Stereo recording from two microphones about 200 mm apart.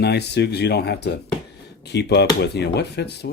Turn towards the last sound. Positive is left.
turn(degrees=55)  # may be behind; listen again after turning